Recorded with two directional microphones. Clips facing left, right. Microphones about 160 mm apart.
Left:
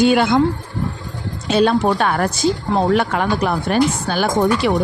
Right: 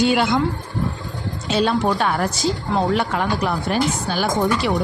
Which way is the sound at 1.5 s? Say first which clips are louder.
Left 4 dB; 55° left (ahead or behind).